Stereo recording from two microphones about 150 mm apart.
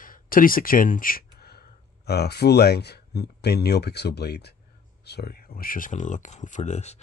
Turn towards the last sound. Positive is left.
turn(degrees=50)  # may be behind; listen again after turning